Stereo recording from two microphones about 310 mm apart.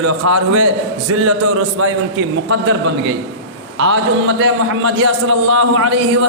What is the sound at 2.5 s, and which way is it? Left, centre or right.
Speech, right.